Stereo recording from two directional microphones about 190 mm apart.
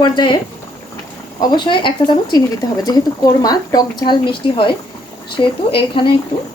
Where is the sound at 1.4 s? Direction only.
25° left (ahead or behind).